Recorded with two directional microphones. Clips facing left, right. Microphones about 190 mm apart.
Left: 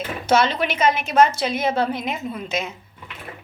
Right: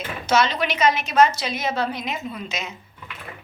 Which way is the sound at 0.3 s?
55° left (ahead or behind).